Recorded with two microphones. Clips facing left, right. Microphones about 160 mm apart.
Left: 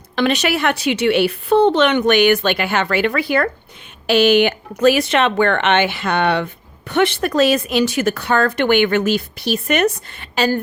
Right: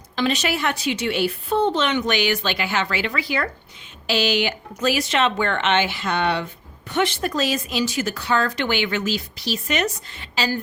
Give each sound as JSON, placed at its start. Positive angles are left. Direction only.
{"t": 0.2, "sound": "speech", "side_deg": 65}